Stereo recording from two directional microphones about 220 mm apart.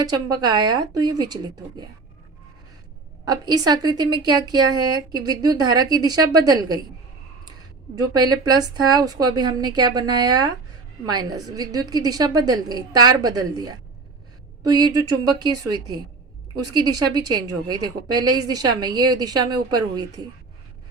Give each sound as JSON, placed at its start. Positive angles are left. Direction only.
{"t": 0.0, "sound": "a woman's voice", "side_deg": -15}
{"t": 3.2, "sound": "speech", "side_deg": -20}
{"t": 7.9, "sound": "a woman's voice", "side_deg": -20}
{"t": 17.4, "sound": "speech", "side_deg": -15}